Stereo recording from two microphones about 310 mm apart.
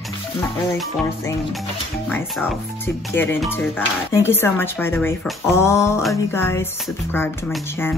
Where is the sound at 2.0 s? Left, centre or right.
Centre.